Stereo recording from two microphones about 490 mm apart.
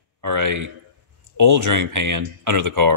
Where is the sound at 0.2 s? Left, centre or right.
Right.